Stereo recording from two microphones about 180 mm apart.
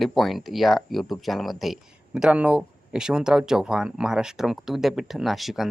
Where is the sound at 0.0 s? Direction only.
Centre (ahead or behind).